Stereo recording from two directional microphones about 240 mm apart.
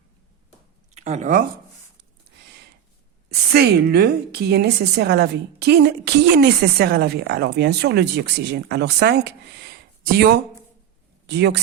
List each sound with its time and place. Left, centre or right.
0.9 s speech: right
3.2 s a woman's voice: right